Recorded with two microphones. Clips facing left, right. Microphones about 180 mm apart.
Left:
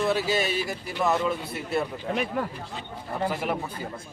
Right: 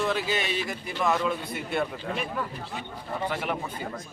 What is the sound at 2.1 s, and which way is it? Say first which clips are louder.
Speech: left 4 dB; 65° left (ahead or behind).